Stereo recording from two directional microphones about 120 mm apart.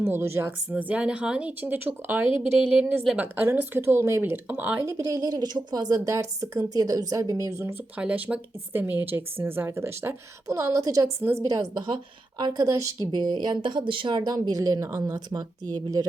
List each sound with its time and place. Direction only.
0.0 s speech: 20° right (ahead or behind)
4.9 s speech: 30° right (ahead or behind)
13.1 s speech: 40° right (ahead or behind)